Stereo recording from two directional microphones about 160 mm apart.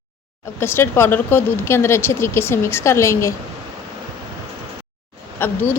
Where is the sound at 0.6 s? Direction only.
15° left (ahead or behind).